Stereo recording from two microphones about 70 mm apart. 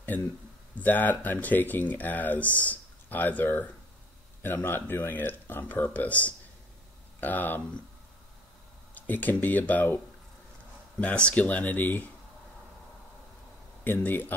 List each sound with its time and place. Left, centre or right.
0.7 s speech: left
8.9 s speech: left
13.8 s speech: left